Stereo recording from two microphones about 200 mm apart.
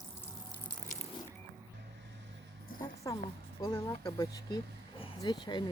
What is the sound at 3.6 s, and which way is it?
Speech, 20° left (ahead or behind).